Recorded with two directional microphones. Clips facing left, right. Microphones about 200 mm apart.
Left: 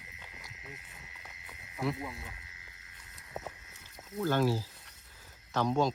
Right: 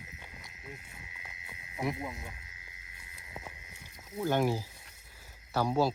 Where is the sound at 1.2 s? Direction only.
10° right (ahead or behind).